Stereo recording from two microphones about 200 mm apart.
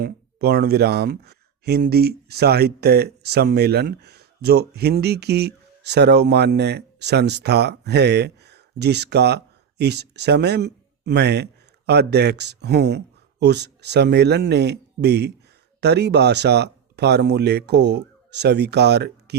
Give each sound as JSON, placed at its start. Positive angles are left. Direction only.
{"t": 0.0, "sound": "speech", "side_deg": -50}